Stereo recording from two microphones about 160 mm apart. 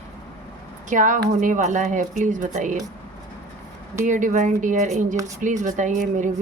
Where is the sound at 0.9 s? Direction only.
55° right (ahead or behind).